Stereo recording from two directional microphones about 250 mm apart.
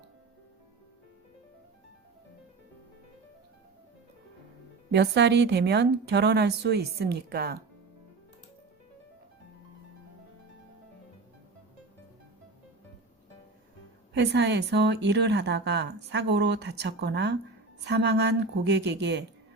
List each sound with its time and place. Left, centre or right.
4.9 s speech: right
14.1 s speech: right